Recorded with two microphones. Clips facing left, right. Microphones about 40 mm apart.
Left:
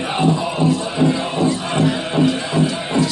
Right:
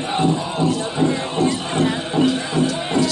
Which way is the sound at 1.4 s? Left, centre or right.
Left.